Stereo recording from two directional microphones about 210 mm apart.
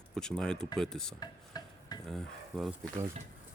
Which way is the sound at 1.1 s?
20° left (ahead or behind).